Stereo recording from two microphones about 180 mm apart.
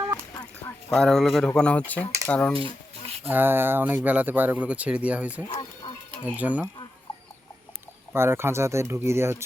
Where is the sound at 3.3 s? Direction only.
10° right (ahead or behind).